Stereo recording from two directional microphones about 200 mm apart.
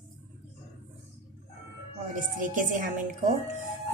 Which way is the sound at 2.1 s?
40° right (ahead or behind).